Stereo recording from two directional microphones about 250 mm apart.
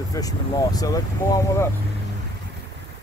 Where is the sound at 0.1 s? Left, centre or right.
Centre.